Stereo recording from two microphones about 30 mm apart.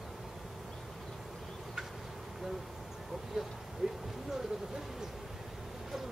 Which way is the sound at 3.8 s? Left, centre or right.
Right.